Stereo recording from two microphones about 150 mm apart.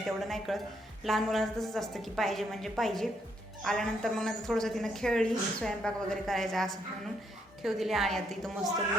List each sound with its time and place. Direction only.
0.2 s a woman's voice: centre (ahead or behind)